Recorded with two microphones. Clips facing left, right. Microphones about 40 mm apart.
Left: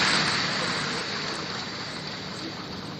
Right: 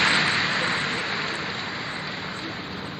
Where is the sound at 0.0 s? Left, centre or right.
Right.